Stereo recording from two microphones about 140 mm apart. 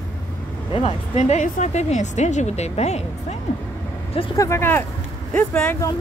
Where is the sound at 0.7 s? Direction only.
45° left (ahead or behind).